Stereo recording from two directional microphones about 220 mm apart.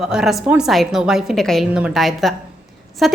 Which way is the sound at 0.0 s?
Centre (ahead or behind).